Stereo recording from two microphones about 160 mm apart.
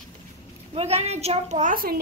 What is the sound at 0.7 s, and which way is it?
A woman's voice, 40° right (ahead or behind).